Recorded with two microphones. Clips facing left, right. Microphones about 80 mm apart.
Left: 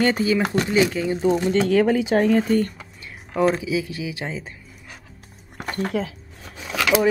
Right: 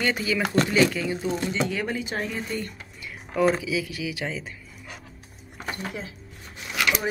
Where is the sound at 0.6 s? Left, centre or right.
Centre.